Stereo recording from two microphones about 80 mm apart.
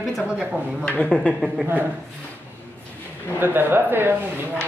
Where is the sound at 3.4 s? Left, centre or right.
Right.